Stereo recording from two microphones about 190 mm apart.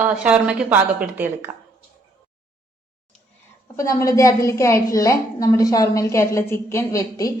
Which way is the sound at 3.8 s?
15° left (ahead or behind).